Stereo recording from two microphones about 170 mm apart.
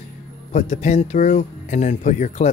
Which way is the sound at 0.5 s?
40° left (ahead or behind).